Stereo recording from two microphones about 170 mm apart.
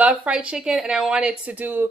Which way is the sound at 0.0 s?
5° right (ahead or behind).